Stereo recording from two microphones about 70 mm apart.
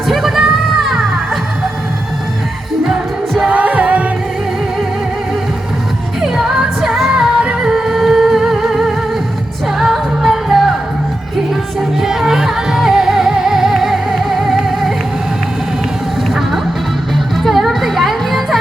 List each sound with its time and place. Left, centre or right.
0.1 s music: centre
0.8 s crowd: centre
3.5 s music: centre
6.2 s music: centre
11.8 s music: centre
17.3 s music: centre